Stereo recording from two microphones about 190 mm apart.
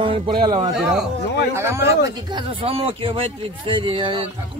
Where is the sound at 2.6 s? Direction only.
30° right (ahead or behind).